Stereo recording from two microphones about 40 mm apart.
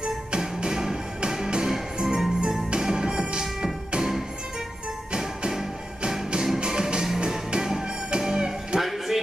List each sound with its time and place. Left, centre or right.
0.0 s music: right
5.5 s music: centre
6.6 s music: centre